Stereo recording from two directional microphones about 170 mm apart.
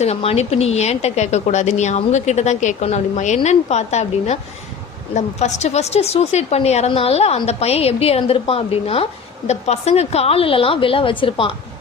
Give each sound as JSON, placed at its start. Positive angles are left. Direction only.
{"t": 0.0, "sound": "a woman's voice", "side_deg": 35}